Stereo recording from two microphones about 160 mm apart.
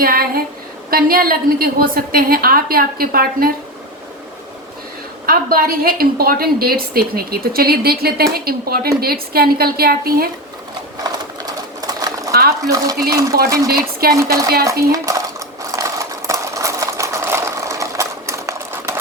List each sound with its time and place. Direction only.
0.0 s music: 65° right (ahead or behind)
0.9 s a woman's voice: 65° right (ahead or behind)
5.2 s a woman's voice: 65° right (ahead or behind)
11.0 s a sound: 25° right (ahead or behind)
12.3 s a woman's voice: 80° right
14.2 s speech: 20° right (ahead or behind)
15.7 s sewing machine: 20° right (ahead or behind)